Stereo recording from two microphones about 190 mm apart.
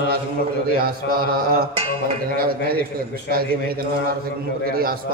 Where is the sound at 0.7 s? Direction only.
50° right (ahead or behind).